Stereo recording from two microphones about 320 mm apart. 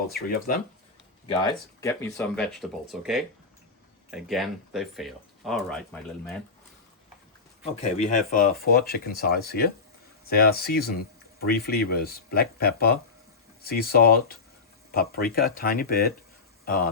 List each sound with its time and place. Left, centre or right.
0.1 s speech: left
1.4 s speech: centre
7.6 s speech: left